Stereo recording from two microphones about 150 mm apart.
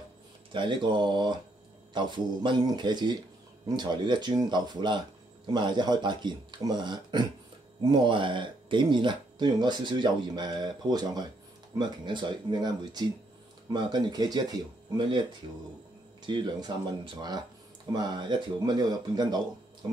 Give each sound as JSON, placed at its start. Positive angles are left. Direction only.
{"t": 0.5, "sound": "speech", "side_deg": -35}
{"t": 16.3, "sound": "speech", "side_deg": -30}